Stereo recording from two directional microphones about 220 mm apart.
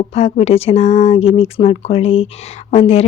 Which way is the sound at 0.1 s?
30° left (ahead or behind).